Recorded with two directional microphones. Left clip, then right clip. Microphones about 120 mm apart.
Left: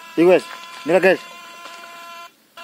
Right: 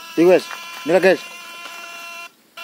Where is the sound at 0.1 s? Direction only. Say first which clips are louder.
Even; 5° left (ahead or behind).